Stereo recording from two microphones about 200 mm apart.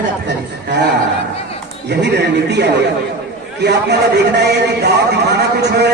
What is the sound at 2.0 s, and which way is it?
A man's voice, 60° right (ahead or behind).